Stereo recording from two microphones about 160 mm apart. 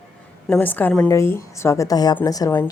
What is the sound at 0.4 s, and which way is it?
A woman's voice, 10° left (ahead or behind).